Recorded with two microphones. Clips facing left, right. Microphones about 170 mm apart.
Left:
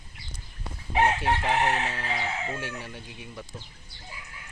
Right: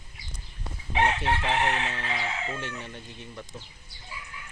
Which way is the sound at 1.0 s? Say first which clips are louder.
Left 1 dB; 10° left (ahead or behind).